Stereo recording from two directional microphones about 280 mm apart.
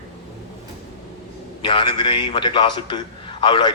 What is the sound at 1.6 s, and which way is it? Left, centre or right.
A man's voice, centre.